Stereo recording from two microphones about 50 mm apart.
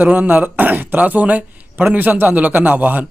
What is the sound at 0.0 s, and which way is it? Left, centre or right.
A man's voice, right.